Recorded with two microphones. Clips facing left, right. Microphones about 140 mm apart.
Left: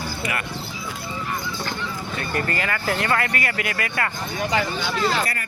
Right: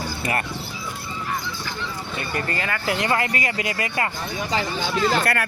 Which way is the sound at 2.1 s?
20° right (ahead or behind).